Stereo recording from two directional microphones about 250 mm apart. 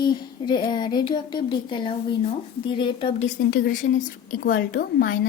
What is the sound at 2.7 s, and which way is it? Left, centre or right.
Speech, centre.